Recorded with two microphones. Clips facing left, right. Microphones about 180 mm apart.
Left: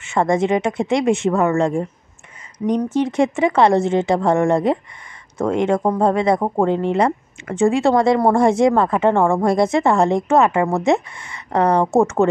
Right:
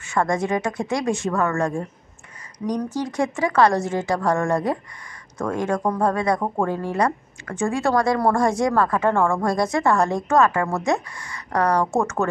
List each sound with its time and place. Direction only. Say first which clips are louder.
0.0 s speech: left 5 dB; 25° left (ahead or behind)